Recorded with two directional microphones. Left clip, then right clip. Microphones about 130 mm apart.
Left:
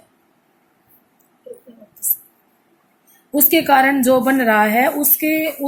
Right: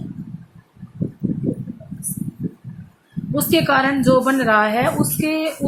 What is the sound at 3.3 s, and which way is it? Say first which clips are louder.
A woman's voice: left 3 dB; 35° left (ahead or behind).